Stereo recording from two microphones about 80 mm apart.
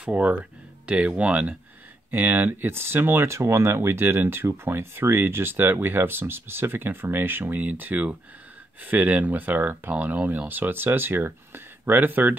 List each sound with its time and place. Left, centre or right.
0.0 s speech: centre